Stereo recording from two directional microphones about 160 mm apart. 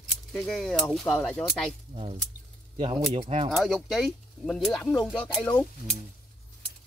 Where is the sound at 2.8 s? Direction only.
30° right (ahead or behind).